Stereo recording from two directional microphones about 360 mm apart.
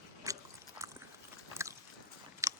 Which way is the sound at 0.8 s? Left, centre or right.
Centre.